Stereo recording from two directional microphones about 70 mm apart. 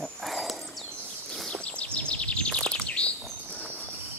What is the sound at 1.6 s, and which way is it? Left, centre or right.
Bird, centre.